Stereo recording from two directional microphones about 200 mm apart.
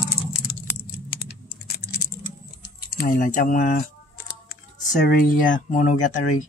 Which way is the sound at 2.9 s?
40° left (ahead or behind).